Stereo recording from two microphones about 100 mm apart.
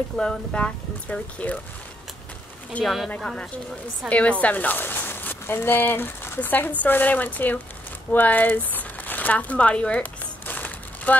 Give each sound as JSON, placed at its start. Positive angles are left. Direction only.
{"t": 0.2, "sound": "speech", "side_deg": 10}
{"t": 2.8, "sound": "speech", "side_deg": 0}
{"t": 8.1, "sound": "crumpling", "side_deg": 15}